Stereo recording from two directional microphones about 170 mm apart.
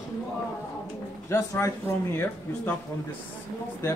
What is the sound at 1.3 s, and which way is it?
Speech, 20° left (ahead or behind).